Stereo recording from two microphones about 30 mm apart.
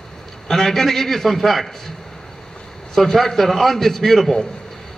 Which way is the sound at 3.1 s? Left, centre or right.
Centre.